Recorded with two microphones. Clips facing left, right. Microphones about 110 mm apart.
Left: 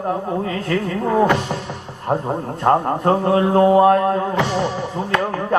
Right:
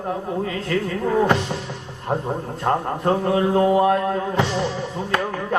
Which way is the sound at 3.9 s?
45° left (ahead or behind).